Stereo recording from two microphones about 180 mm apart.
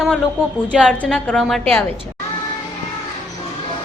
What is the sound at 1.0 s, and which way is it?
Speech, 5° left (ahead or behind).